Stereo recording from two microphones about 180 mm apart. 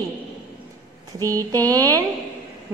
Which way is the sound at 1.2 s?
20° right (ahead or behind).